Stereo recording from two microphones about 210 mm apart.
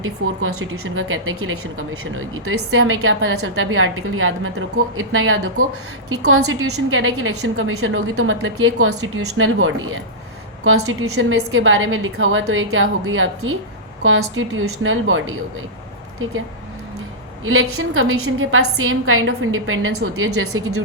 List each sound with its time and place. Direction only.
0.0 s a woman's voice: 70° right (ahead or behind)
6.1 s a woman's voice: 85° right; by 15.2 s 70° right (ahead or behind)
17.4 s a woman's voice: 80° right